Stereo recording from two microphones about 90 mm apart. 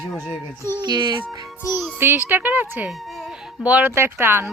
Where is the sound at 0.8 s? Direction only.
55° right (ahead or behind).